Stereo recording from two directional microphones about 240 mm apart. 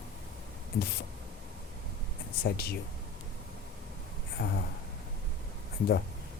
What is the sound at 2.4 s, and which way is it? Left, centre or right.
Speech, left.